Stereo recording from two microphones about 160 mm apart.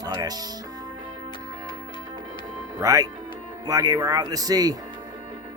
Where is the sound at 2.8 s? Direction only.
20° right (ahead or behind).